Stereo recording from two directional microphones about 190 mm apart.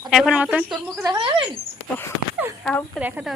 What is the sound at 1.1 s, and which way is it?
Speech, 25° right (ahead or behind).